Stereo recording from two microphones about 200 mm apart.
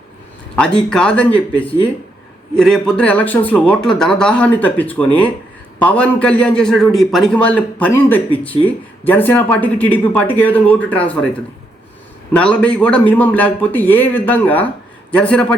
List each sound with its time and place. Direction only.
0.9 s a man's voice: 5° left (ahead or behind)
12.3 s a man's voice: 5° left (ahead or behind)